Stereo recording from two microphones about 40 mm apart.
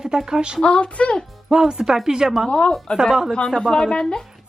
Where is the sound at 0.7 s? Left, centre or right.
Left.